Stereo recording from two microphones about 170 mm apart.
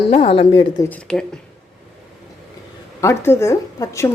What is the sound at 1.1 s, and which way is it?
Speech, 5° left (ahead or behind).